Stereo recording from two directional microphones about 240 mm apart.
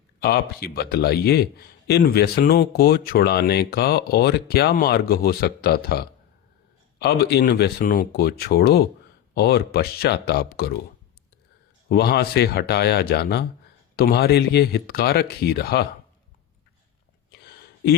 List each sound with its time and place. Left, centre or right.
0.2 s a man's voice: left
11.9 s a man's voice: left